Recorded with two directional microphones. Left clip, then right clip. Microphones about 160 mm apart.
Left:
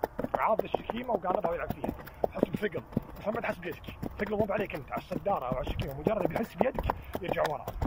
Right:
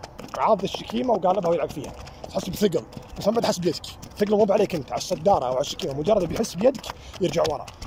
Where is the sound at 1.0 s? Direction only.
35° right (ahead or behind).